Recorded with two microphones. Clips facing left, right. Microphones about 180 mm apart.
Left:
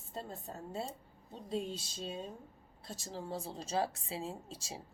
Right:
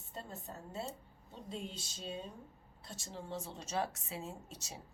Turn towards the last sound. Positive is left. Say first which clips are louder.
# left 4 dB
turn(degrees=30)  # may be behind; listen again after turning